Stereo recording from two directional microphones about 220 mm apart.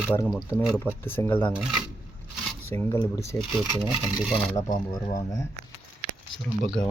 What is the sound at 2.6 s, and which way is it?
Speech, 10° left (ahead or behind).